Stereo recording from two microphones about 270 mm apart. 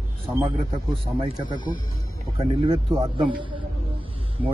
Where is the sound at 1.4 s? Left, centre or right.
Centre.